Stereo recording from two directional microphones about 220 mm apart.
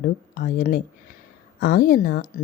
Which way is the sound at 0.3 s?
40° left (ahead or behind).